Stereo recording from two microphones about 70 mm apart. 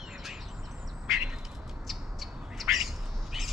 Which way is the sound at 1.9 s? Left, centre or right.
Centre.